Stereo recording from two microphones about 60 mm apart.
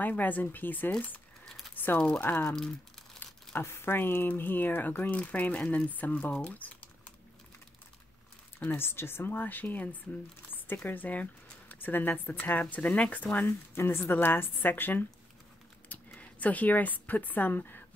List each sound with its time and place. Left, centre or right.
0.2 s speech: left
1.8 s crumpling: left
2.1 s speech: left
2.5 s speech: centre
3.6 s speech: left
5.6 s speech: centre
5.9 s speech: left
6.3 s typing: left
8.5 s speech: left
10.9 s speech: left
13.5 s speech: left
16.2 s speech: left